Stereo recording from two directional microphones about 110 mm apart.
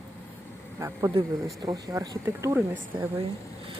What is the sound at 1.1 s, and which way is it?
Speech, 45° right (ahead or behind).